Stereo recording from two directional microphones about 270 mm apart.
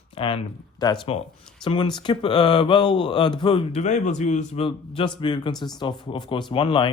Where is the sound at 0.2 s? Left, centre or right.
Centre.